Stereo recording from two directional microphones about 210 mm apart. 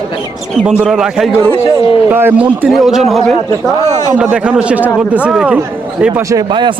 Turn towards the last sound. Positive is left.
turn(degrees=-10)  # may be behind; listen again after turning